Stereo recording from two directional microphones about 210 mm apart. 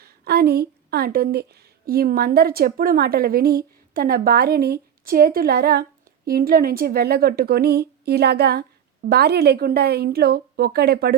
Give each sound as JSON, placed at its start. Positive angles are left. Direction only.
{"t": 0.0, "sound": "a woman's voice", "side_deg": -50}